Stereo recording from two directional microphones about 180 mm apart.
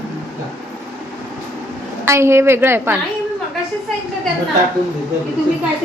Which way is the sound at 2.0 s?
15° right (ahead or behind).